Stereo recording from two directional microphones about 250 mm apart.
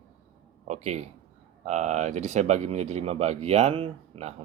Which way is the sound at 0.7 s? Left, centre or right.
Right.